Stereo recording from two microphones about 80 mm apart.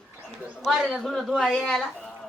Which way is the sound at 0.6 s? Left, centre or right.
Centre.